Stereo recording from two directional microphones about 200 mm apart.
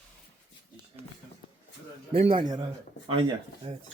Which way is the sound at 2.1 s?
25° right (ahead or behind).